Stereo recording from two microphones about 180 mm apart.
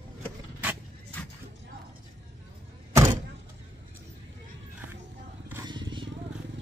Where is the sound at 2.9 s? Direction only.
15° right (ahead or behind).